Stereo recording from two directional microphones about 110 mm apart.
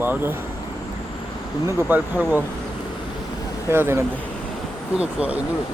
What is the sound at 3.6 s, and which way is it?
Speech, 20° right (ahead or behind).